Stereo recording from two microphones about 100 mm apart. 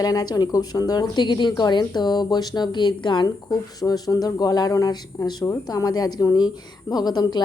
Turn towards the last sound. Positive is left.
turn(degrees=45)  # may be behind; listen again after turning